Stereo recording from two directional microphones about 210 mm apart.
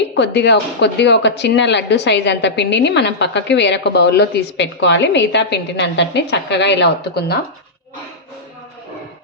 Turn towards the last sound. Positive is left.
turn(degrees=50)  # may be behind; listen again after turning